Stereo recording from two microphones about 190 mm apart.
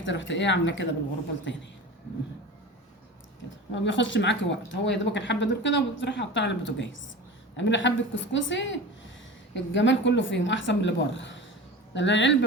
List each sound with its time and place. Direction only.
0.0 s a woman's voice: 75° left (ahead or behind)
3.7 s a woman's voice: 75° left (ahead or behind)